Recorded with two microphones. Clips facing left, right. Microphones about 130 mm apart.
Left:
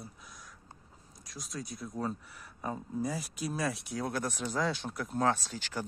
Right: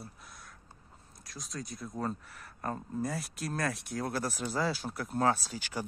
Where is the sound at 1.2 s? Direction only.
Centre (ahead or behind).